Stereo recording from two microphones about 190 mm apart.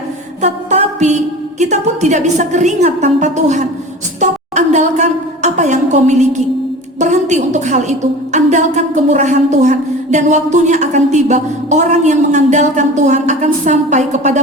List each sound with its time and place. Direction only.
0.4 s a woman's voice: 35° right (ahead or behind)